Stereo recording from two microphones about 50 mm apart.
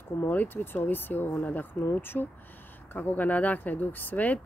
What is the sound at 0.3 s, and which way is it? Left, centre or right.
Speech, left.